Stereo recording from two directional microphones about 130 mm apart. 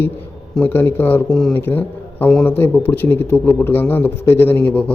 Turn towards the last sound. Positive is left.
turn(degrees=10)  # may be behind; listen again after turning